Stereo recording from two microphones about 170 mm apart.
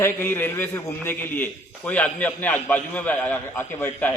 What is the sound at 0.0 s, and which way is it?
A man's voice, 10° left (ahead or behind).